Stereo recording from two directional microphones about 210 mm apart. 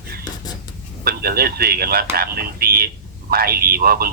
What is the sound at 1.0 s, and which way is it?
A man's voice, 45° right (ahead or behind).